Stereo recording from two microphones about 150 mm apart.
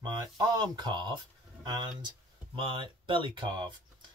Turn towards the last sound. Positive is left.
turn(degrees=-35)  # may be behind; listen again after turning